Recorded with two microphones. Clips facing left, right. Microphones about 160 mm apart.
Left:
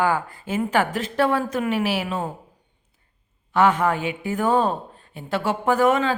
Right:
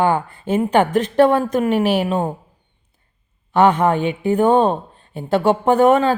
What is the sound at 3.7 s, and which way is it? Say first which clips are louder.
Speech: right 5 dB; 30° right (ahead or behind).